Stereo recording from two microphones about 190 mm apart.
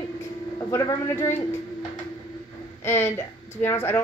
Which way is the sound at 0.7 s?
15° left (ahead or behind).